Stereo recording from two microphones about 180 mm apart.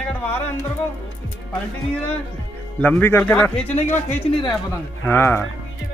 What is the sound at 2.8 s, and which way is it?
Speech, 10° left (ahead or behind).